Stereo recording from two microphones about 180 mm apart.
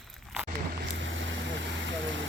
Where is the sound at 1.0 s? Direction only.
90° right.